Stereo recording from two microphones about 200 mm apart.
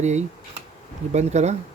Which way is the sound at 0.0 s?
35° right (ahead or behind).